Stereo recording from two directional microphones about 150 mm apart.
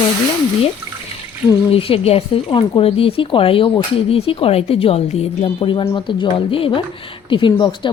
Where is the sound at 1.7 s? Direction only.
40° left (ahead or behind).